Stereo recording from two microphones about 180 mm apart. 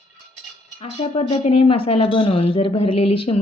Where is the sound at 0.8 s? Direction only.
30° left (ahead or behind).